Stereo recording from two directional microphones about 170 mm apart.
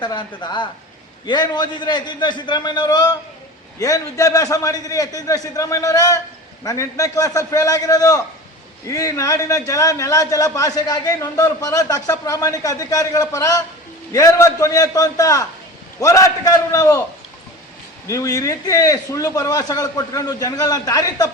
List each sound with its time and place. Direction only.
0.0 s a man's voice: 25° left (ahead or behind)
18.1 s a man's voice: 20° left (ahead or behind)